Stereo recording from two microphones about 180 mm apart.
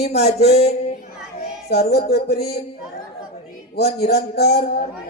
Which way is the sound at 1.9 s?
65° left (ahead or behind).